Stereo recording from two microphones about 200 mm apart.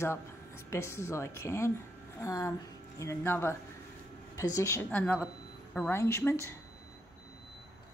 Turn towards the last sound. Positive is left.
turn(degrees=15)  # may be behind; listen again after turning